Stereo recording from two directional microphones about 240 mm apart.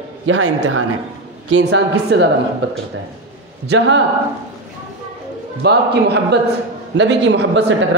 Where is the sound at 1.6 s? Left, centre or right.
Right.